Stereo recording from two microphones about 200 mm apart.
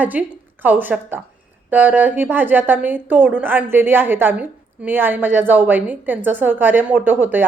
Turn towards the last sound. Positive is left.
turn(degrees=-10)  # may be behind; listen again after turning